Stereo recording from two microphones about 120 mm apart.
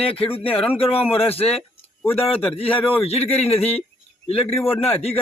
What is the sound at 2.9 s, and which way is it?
Speech, 55° left (ahead or behind).